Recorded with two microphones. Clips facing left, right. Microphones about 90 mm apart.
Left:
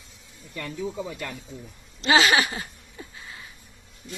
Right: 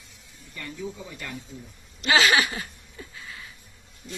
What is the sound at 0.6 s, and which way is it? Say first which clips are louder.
Speech: left 5 dB; 90° left.